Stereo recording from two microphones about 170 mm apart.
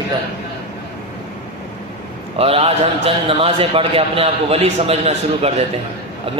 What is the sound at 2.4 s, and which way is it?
A man's voice, 35° right (ahead or behind).